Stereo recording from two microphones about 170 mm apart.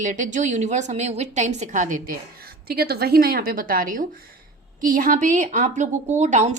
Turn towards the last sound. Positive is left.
turn(degrees=-40)  # may be behind; listen again after turning